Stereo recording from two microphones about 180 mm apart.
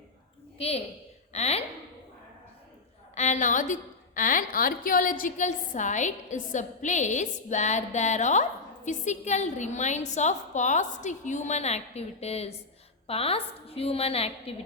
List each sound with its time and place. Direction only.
0.6 s a woman's voice: 30° left (ahead or behind)
3.2 s a woman's voice: 40° left (ahead or behind)